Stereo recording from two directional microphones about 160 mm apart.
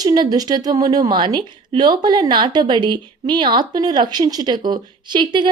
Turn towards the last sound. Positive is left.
turn(degrees=-30)  # may be behind; listen again after turning